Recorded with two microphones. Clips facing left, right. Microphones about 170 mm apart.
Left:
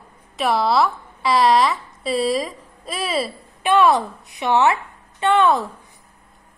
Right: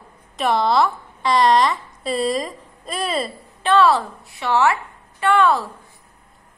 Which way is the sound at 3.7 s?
15° left (ahead or behind).